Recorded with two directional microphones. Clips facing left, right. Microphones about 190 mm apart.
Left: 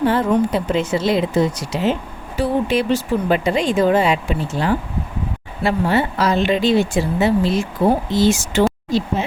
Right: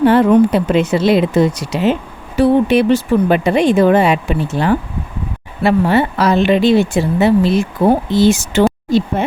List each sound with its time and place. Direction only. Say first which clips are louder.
0.0 s speech: right 7 dB; 70° right (ahead or behind)